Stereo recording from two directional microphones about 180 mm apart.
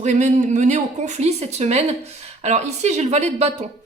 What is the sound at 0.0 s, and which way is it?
Speech, 40° right (ahead or behind).